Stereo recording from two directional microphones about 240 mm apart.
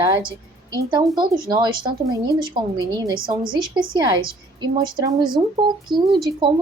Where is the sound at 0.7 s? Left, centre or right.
Centre.